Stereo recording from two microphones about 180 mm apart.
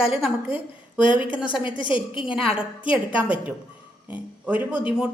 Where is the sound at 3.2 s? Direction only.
10° right (ahead or behind).